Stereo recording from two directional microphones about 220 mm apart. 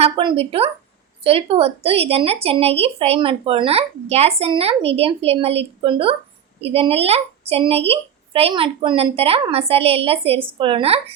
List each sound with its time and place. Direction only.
0.0 s a woman's voice: 25° right (ahead or behind)